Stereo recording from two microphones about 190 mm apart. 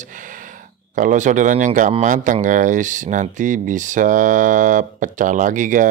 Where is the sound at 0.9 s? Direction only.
40° right (ahead or behind).